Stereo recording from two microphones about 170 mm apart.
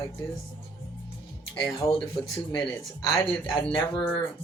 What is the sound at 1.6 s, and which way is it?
Speech, 30° left (ahead or behind).